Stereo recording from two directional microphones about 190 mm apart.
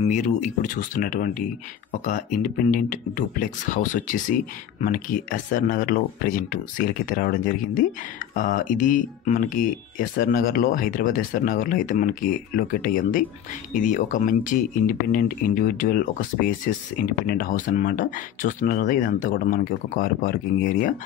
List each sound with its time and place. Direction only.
0.0 s speech: 40° left (ahead or behind)